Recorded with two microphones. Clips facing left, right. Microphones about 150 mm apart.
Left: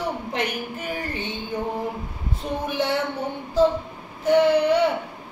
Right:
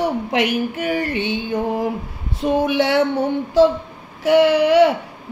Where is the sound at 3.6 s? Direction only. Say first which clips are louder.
Right 4 dB; 90° right.